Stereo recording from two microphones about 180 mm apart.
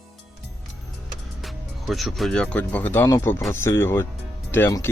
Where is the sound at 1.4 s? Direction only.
Centre (ahead or behind).